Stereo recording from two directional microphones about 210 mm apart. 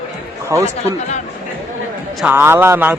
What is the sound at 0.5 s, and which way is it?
Speech, 15° right (ahead or behind).